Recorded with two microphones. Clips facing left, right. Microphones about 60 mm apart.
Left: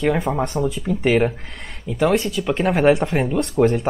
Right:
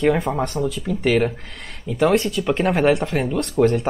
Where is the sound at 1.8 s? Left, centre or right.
Centre.